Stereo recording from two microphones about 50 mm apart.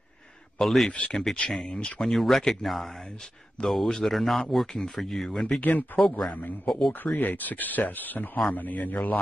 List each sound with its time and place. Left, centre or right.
0.6 s speech: centre
0.9 s speech: left
2.0 s a man's voice: centre
5.6 s speech: left
5.9 s a man's voice: centre
6.3 s speech: left